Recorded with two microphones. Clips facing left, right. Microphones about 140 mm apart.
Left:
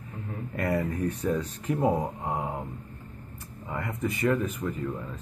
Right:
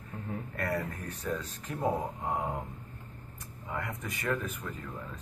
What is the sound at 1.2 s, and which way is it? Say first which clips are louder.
Speech: left 6 dB; 25° left (ahead or behind).